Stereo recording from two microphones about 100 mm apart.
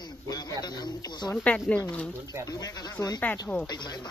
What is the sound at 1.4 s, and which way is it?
Speech, 10° left (ahead or behind).